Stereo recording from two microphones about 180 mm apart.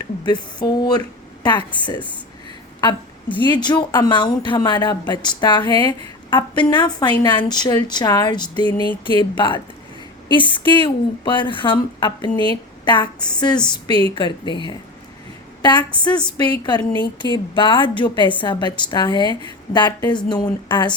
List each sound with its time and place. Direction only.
0.3 s a woman's voice: 25° left (ahead or behind)
15.6 s a woman's voice: 25° left (ahead or behind)